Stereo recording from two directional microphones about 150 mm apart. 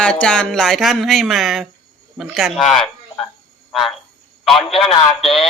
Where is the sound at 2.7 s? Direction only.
Centre (ahead or behind).